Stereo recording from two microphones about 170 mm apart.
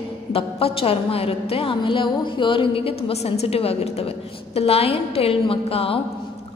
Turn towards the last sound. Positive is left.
turn(degrees=35)  # may be behind; listen again after turning